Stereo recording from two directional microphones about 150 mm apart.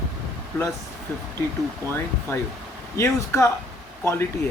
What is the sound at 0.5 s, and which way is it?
Speech, 15° left (ahead or behind).